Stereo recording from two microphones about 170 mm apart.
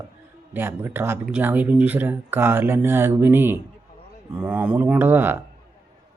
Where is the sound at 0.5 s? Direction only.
15° right (ahead or behind).